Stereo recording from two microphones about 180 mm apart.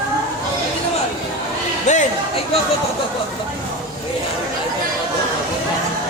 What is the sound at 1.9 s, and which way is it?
Speech, 40° left (ahead or behind).